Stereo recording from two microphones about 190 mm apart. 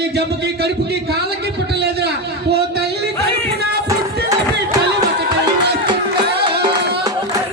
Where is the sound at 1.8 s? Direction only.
60° right (ahead or behind).